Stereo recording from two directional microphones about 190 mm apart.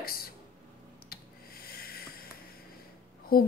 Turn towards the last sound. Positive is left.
turn(degrees=50)  # may be behind; listen again after turning